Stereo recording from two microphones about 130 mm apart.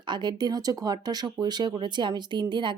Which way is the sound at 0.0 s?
35° right (ahead or behind).